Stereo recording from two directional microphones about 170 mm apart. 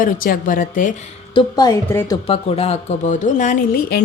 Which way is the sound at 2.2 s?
35° left (ahead or behind).